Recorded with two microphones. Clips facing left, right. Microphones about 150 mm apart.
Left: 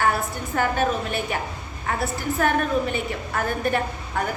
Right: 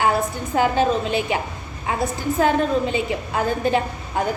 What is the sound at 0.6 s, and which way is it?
A woman's voice, 15° right (ahead or behind).